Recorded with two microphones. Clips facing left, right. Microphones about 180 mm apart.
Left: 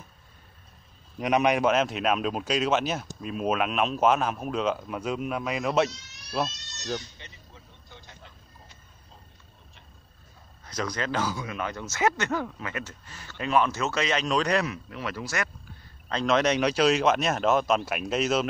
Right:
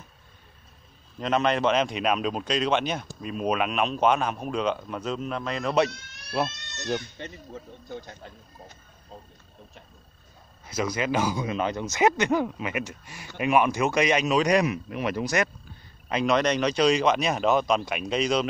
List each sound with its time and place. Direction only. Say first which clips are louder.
1.1 s speech: left 1 dB; 15° left (ahead or behind)
5.9 s speech: right 2 dB; 55° right (ahead or behind)
10.6 s speech: right 3 dB; 10° right (ahead or behind)
16.3 s speech: even; 5° left (ahead or behind)